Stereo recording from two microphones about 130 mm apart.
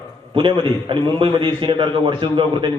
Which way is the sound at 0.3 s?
40° right (ahead or behind).